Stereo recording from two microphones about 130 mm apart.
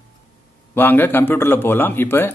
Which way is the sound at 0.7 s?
15° left (ahead or behind).